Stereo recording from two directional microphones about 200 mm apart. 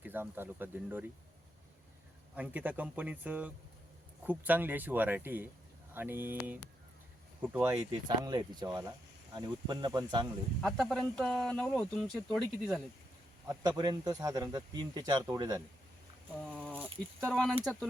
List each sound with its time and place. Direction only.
0.0 s speech: 10° right (ahead or behind)
2.3 s speech: 10° right (ahead or behind)
10.6 s speech: centre (ahead or behind)
13.5 s speech: 20° right (ahead or behind)
16.5 s a sound: 5° left (ahead or behind)
17.2 s speech: 5° left (ahead or behind)